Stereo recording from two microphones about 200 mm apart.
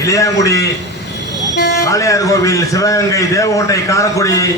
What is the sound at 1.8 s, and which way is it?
A man's voice, 15° left (ahead or behind).